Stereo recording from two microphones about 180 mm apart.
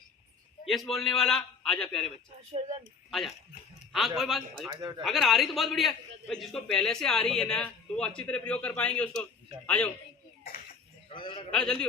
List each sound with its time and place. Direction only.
0.7 s a man's voice: centre (ahead or behind)
2.5 s speech: 35° right (ahead or behind)
3.1 s a man's voice: centre (ahead or behind)
4.7 s speech: 20° right (ahead or behind)
5.0 s a man's voice: centre (ahead or behind)
11.1 s a sound: 30° left (ahead or behind)
11.5 s a man's voice: 5° left (ahead or behind)